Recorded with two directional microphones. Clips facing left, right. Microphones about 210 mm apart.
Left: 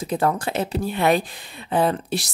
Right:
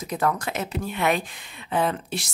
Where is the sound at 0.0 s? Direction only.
30° left (ahead or behind).